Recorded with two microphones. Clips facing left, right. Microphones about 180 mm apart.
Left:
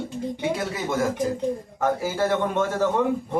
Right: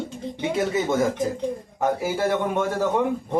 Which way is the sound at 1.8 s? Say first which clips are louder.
Right 1 dB; 15° right (ahead or behind).